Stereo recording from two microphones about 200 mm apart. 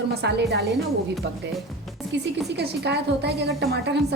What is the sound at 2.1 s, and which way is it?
A woman's voice, 60° right (ahead or behind).